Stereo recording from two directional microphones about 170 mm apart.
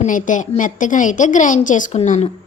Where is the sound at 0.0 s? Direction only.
50° left (ahead or behind).